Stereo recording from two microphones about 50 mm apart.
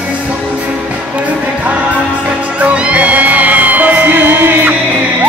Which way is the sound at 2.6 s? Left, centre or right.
Right.